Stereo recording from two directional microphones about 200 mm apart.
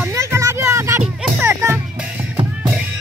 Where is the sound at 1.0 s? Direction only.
10° right (ahead or behind).